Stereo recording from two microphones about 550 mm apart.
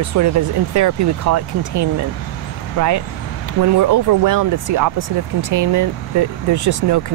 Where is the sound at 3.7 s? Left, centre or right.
Right.